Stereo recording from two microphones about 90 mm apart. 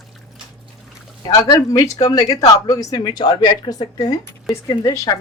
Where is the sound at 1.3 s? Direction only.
45° left (ahead or behind).